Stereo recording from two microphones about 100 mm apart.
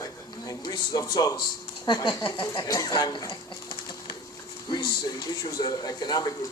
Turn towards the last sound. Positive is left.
turn(degrees=40)  # may be behind; listen again after turning